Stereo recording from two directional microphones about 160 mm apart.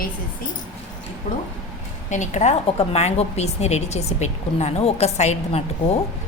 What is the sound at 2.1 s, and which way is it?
A woman's voice, 50° left (ahead or behind).